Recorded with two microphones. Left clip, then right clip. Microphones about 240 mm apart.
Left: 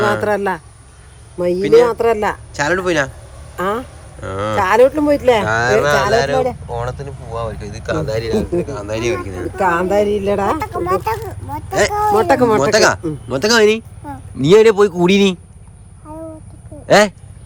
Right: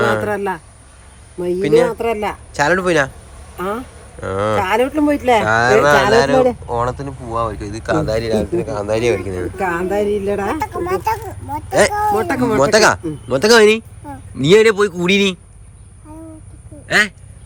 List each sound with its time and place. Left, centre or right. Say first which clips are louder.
0.0 s a sound: even; centre
0.3 s speech: left 3 dB; left
1.5 s speech: left 3 dB; centre
2.0 s speech: left 4 dB; centre
2.5 s speech: right 5 dB; centre
4.2 s speech: even; centre
16.9 s speech: left 4 dB; left